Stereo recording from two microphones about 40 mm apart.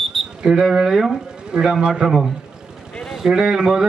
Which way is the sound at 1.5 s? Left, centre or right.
Centre.